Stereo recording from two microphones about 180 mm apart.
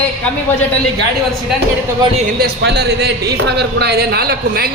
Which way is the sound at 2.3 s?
65° right (ahead or behind).